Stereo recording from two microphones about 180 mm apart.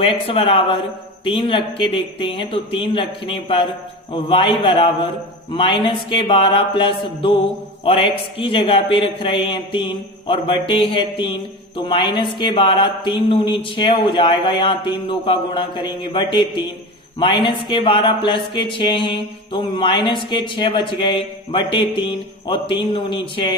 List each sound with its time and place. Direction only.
0.0 s speech: 30° left (ahead or behind)